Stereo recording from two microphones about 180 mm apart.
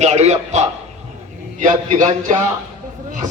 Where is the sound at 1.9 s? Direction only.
45° right (ahead or behind).